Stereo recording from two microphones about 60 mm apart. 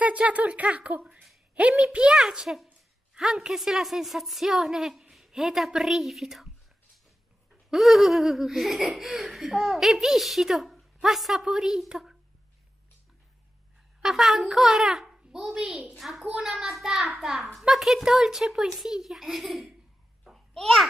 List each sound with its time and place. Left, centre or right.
0.0 s a child's voice: right; by 6.5 s centre
7.7 s speech: centre
14.0 s a child's voice: centre
20.2 s babbling: centre